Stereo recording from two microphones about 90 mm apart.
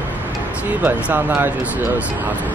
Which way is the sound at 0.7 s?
20° right (ahead or behind).